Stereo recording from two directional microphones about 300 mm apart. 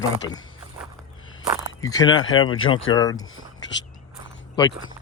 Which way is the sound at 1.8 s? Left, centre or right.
Centre.